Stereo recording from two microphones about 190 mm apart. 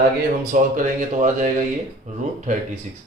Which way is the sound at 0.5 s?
40° right (ahead or behind).